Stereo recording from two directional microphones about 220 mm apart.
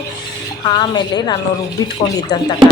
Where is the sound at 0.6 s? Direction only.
20° left (ahead or behind).